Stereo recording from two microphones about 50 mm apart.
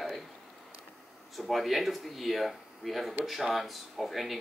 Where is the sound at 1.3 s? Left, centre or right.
Centre.